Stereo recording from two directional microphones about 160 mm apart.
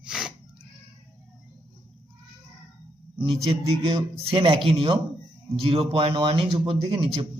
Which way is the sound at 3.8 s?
35° right (ahead or behind).